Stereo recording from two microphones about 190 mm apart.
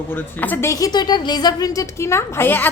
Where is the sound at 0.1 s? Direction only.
10° left (ahead or behind).